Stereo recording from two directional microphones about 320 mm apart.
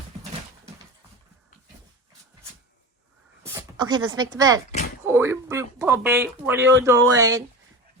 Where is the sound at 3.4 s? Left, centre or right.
Centre.